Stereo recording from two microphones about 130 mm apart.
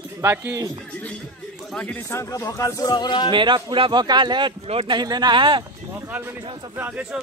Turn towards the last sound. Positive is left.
turn(degrees=-10)  # may be behind; listen again after turning